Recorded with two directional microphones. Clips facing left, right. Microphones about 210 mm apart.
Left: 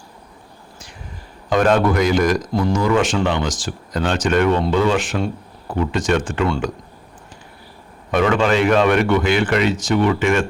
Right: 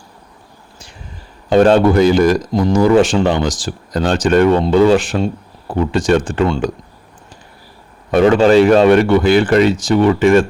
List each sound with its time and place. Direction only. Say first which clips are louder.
1.5 s a man's voice: right 6 dB; 30° right (ahead or behind)
2.5 s a man's voice: right 4 dB; 20° right (ahead or behind)
2.7 s a man's voice: right 8 dB; 30° right (ahead or behind)
8.1 s a man's voice: right 7 dB; 35° right (ahead or behind)